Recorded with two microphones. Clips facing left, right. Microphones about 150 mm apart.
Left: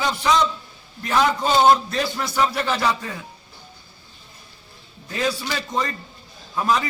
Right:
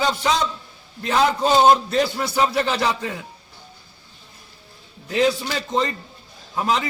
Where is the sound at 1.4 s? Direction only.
20° right (ahead or behind).